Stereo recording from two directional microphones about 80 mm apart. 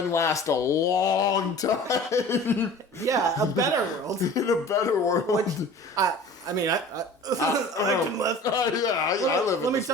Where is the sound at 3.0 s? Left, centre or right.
Right.